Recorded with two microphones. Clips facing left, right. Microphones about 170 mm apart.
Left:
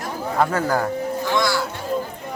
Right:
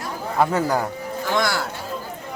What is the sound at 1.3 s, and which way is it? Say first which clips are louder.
Speech: left 1 dB; 55° right (ahead or behind).